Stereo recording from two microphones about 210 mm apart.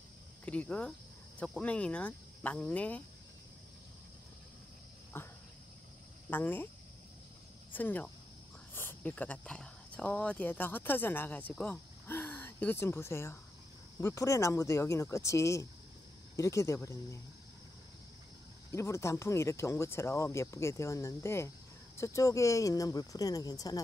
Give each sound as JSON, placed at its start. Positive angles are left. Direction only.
{"t": 0.5, "sound": "speech", "side_deg": 5}
{"t": 5.1, "sound": "cricket", "side_deg": 10}
{"t": 6.3, "sound": "speech", "side_deg": 10}
{"t": 7.7, "sound": "speech", "side_deg": 10}
{"t": 18.7, "sound": "speech", "side_deg": 15}